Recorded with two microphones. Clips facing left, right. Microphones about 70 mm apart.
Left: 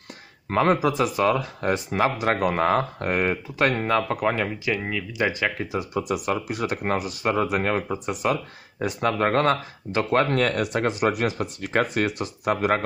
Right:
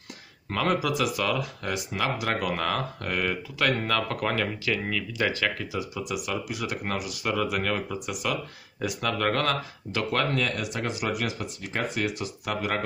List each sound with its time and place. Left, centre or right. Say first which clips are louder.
0.5 s speech: left 5 dB; left
5.7 s speech: left 5 dB; left
10.3 s speech: left 6 dB; left